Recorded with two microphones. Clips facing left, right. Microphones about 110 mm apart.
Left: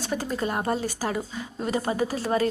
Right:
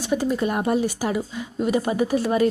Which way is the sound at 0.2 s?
35° left (ahead or behind).